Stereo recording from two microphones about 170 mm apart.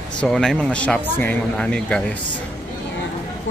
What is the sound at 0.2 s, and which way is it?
A man's voice, centre (ahead or behind).